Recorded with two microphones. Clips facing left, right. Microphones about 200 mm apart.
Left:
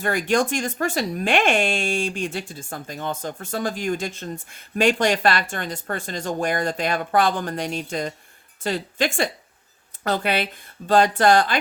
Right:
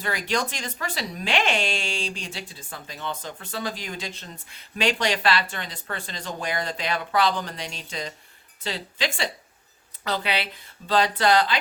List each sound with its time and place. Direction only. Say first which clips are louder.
0.0 s speech: left 6 dB; 50° left (ahead or behind)